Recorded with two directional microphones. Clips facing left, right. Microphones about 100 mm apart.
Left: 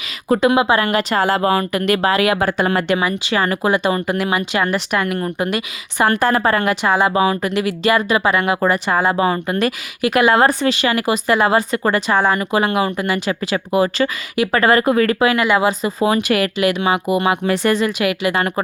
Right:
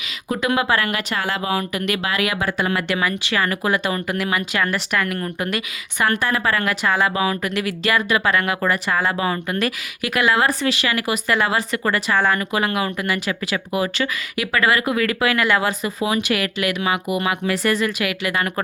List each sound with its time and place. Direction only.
0.3 s speech: 30° left (ahead or behind); by 1.8 s 50° left (ahead or behind)
1.8 s speech: 35° left (ahead or behind); by 15.9 s 20° left (ahead or behind)
16.0 s speech: 40° left (ahead or behind)
16.6 s speech: 30° left (ahead or behind)